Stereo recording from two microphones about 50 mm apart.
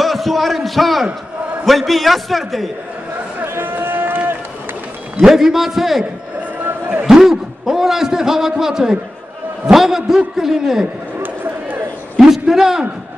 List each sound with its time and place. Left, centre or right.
0.0 s a man's voice: centre
1.0 s a sound: centre
1.7 s a man's voice: centre
3.4 s run: right
5.2 s a man's voice: centre
6.6 s basketball bounce: right
7.1 s a man's voice: centre
11.1 s a sound: right
12.2 s a man's voice: centre